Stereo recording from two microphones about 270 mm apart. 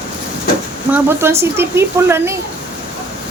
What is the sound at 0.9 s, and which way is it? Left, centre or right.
A woman's voice, centre.